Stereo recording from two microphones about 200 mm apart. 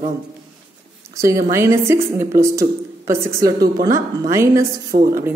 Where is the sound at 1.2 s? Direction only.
15° right (ahead or behind).